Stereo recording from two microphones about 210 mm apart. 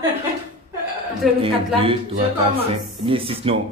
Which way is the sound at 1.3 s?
25° right (ahead or behind).